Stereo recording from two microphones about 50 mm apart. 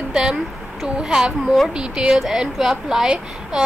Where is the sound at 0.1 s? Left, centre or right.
Centre.